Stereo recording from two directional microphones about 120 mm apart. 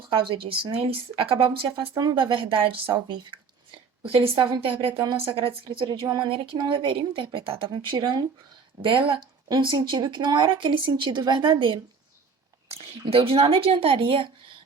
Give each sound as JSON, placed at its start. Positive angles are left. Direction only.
{"t": 0.1, "sound": "a woman's voice", "side_deg": -45}
{"t": 2.0, "sound": "speech", "side_deg": -35}
{"t": 4.0, "sound": "a woman's voice", "side_deg": -50}